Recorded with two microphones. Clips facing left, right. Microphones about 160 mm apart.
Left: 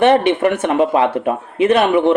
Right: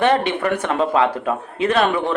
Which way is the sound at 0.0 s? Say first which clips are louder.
Left 5 dB; 20° left (ahead or behind).